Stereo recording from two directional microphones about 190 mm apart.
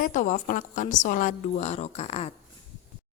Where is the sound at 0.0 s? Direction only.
40° left (ahead or behind).